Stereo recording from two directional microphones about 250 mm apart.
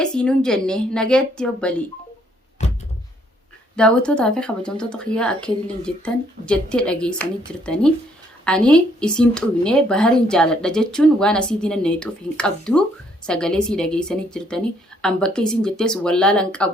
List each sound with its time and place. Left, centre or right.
0.0 s a woman's voice: centre
2.6 s a sound: left
3.8 s a woman's voice: centre